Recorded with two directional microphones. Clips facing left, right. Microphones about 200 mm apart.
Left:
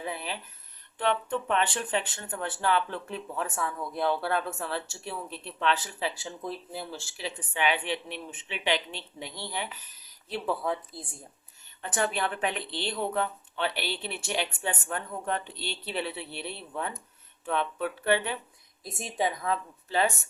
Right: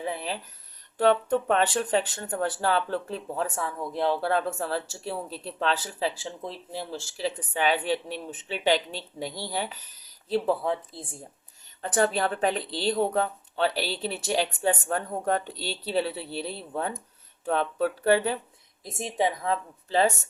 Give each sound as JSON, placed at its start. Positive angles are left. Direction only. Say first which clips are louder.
{"t": 0.0, "sound": "a sound", "louder": "right 4 dB", "side_deg": -30}
{"t": 0.9, "sound": "speech", "louder": "right 6 dB", "side_deg": -40}
{"t": 18.8, "sound": "a woman's voice", "louder": "right 3 dB", "side_deg": -25}